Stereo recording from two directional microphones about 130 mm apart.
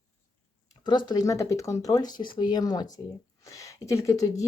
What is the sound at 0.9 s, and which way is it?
A woman's voice, 35° left (ahead or behind).